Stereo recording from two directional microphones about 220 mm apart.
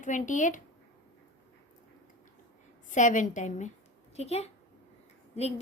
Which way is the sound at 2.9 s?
35° left (ahead or behind).